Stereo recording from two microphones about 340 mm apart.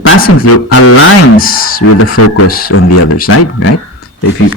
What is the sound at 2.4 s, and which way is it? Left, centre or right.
Speech, left.